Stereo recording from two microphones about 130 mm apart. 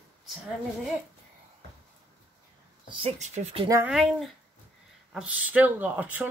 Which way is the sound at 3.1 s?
60° right (ahead or behind).